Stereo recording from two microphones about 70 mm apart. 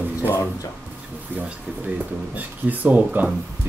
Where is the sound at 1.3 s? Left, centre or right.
Right.